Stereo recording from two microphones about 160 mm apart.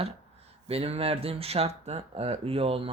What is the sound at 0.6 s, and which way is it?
Speech, 40° right (ahead or behind).